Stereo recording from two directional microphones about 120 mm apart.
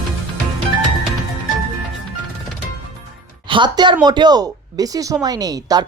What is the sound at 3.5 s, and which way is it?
A woman's voice, 40° right (ahead or behind).